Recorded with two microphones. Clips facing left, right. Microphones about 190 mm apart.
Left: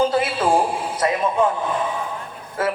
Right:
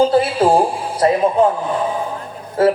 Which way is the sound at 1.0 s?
35° right (ahead or behind).